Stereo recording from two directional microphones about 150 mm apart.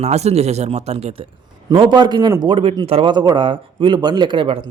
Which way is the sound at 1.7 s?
30° right (ahead or behind).